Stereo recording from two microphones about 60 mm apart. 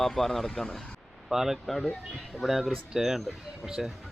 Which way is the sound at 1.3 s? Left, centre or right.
Centre.